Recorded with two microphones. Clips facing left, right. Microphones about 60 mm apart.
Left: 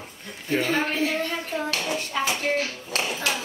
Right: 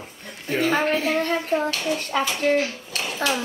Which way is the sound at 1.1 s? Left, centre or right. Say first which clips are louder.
Right 5 dB; right.